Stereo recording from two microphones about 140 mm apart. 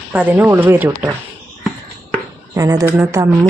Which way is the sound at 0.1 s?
10° right (ahead or behind).